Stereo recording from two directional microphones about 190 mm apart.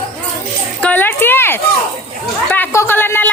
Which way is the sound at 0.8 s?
10° left (ahead or behind).